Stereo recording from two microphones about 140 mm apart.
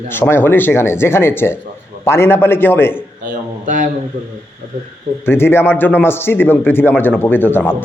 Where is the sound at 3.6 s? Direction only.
65° right (ahead or behind).